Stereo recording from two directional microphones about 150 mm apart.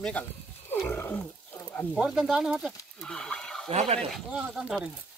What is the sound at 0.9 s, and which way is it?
Roaring cats, 15° left (ahead or behind).